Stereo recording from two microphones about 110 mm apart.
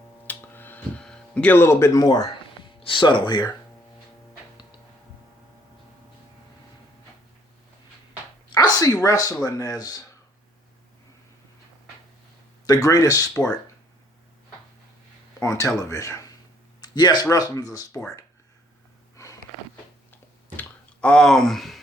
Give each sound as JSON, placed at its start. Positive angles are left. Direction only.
{"t": 0.3, "sound": "a sound", "side_deg": 15}
{"t": 1.0, "sound": "speech", "side_deg": 10}
{"t": 2.8, "sound": "speech", "side_deg": 50}
{"t": 8.4, "sound": "a sound", "side_deg": 40}
{"t": 9.0, "sound": "speech", "side_deg": 35}
{"t": 12.6, "sound": "speech", "side_deg": 35}
{"t": 15.4, "sound": "speech", "side_deg": 30}
{"t": 16.8, "sound": "speech", "side_deg": 40}
{"t": 19.1, "sound": "sniff", "side_deg": 30}
{"t": 20.6, "sound": "a sound", "side_deg": 10}